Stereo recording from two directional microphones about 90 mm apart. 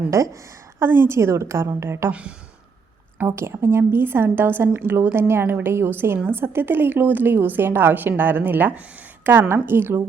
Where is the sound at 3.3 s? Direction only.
30° right (ahead or behind).